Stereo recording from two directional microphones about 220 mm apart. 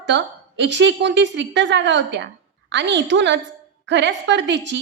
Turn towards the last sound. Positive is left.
turn(degrees=-55)  # may be behind; listen again after turning